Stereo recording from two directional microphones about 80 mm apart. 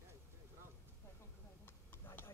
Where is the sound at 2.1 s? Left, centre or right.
Left.